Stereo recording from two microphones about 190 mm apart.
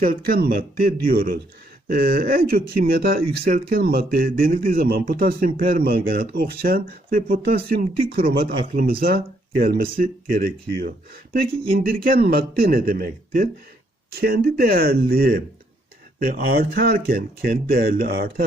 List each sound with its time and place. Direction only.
0.0 s speech: 50° right (ahead or behind)